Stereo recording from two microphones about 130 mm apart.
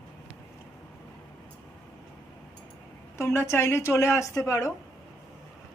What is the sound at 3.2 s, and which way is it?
Speech, 20° left (ahead or behind).